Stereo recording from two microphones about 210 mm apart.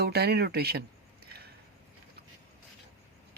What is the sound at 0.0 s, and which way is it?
Speech, 50° right (ahead or behind).